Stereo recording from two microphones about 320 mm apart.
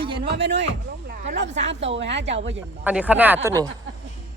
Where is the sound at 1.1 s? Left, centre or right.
Right.